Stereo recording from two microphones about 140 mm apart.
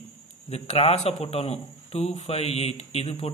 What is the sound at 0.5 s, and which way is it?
A man's voice, 50° left (ahead or behind).